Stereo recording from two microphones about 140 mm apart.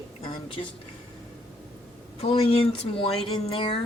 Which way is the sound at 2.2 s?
45° left (ahead or behind).